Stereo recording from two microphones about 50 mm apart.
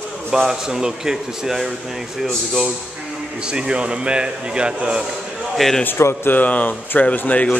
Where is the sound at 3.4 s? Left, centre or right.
Centre.